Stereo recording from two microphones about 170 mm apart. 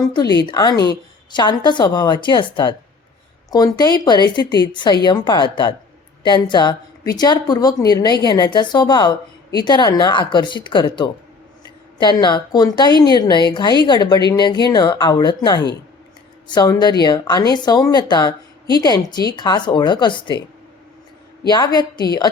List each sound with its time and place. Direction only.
0.0 s a woman's voice: 20° left (ahead or behind)
21.4 s a woman's voice: 25° left (ahead or behind)